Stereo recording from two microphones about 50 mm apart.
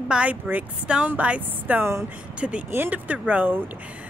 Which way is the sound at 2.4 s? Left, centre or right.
Centre.